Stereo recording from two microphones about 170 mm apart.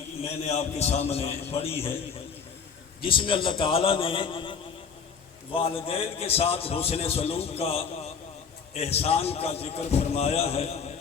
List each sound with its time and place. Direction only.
0.2 s a man's voice: 35° left (ahead or behind)
3.0 s a man's voice: 30° left (ahead or behind)
5.5 s a man's voice: 35° left (ahead or behind)